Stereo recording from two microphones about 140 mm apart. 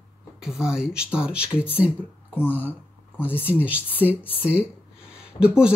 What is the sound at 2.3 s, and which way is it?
Speech, 10° left (ahead or behind).